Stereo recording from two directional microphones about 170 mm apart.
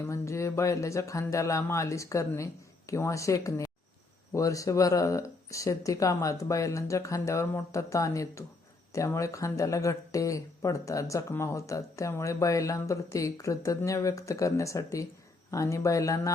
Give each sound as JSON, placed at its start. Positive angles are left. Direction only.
{"t": 0.0, "sound": "speech", "side_deg": 15}